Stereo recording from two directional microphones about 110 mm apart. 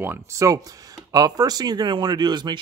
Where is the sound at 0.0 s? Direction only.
25° right (ahead or behind).